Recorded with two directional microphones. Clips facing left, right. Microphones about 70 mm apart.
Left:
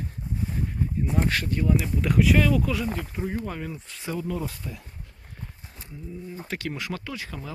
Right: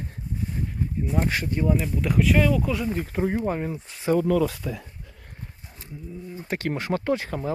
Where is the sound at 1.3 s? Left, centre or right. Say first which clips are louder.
Right 1 dB; centre.